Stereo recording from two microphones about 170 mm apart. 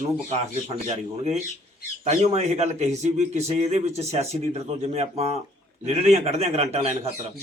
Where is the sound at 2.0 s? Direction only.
40° right (ahead or behind).